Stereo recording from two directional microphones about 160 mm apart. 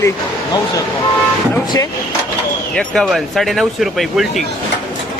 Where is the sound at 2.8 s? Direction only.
Centre (ahead or behind).